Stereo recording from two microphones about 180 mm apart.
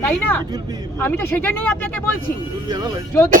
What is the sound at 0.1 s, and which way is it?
Speech, 10° left (ahead or behind).